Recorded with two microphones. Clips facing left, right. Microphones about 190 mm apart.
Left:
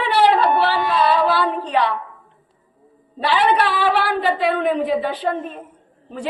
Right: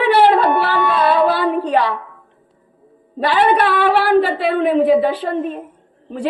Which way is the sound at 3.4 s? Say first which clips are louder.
Right 4 dB; 55° right (ahead or behind).